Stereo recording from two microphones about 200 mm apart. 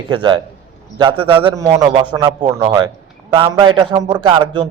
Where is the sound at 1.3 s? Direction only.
25° right (ahead or behind).